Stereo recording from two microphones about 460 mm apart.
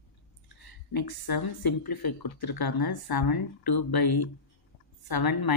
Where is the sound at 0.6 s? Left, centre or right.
Left.